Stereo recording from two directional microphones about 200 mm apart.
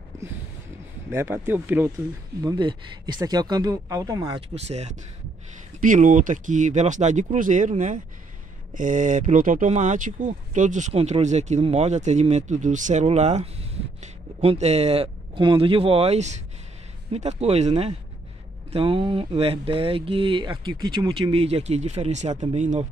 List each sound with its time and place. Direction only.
1.1 s speech: 10° right (ahead or behind)
2.4 s speech: 20° right (ahead or behind)